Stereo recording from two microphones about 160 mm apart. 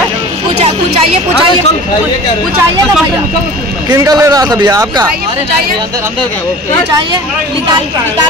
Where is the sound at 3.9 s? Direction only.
25° right (ahead or behind).